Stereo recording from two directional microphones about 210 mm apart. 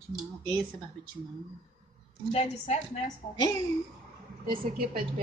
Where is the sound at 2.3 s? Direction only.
30° left (ahead or behind).